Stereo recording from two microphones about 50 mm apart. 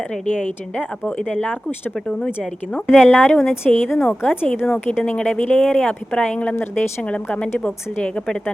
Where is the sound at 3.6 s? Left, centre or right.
Centre.